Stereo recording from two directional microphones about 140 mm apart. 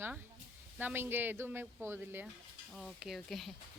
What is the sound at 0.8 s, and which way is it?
Speech, 15° right (ahead or behind).